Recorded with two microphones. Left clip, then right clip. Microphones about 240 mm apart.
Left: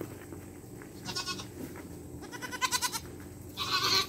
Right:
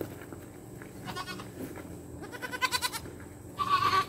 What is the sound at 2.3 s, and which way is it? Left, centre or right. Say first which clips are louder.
Goat: right 1 dB; centre.